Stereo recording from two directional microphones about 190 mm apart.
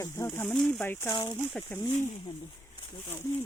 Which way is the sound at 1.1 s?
25° left (ahead or behind).